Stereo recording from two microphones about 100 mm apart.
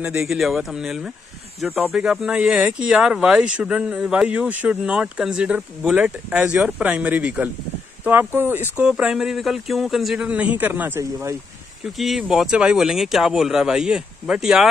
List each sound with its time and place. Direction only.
0.2 s speech: 5° right (ahead or behind)
10.2 s speech: 15° right (ahead or behind)
11.8 s speech: 5° right (ahead or behind)